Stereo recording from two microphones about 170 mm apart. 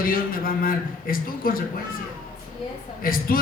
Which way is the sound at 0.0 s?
60° left (ahead or behind).